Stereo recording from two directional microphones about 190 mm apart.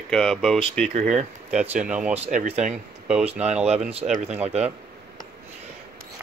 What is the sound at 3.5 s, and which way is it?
Speech, 5° right (ahead or behind).